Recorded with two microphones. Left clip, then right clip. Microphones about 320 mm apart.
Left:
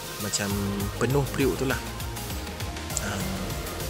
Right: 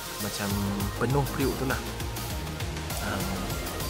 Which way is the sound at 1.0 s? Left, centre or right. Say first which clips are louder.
Left 3 dB; centre.